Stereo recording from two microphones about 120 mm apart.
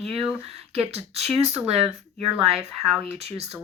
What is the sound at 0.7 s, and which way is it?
Speech, 60° right (ahead or behind).